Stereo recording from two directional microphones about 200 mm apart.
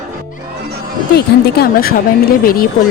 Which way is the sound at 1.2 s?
50° left (ahead or behind).